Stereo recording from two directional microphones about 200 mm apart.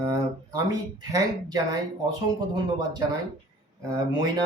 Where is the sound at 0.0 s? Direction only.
20° right (ahead or behind).